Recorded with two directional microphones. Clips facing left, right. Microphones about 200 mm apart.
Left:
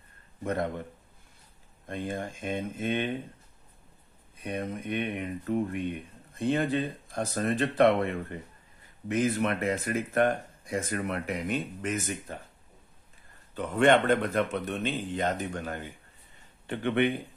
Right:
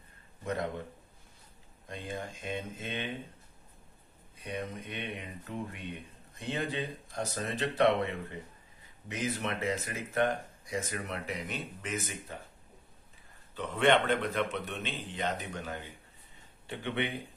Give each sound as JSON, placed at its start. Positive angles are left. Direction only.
{"t": 0.4, "sound": "speech", "side_deg": 55}
{"t": 1.9, "sound": "speech", "side_deg": 50}
{"t": 4.5, "sound": "speech", "side_deg": 55}
{"t": 13.6, "sound": "speech", "side_deg": 45}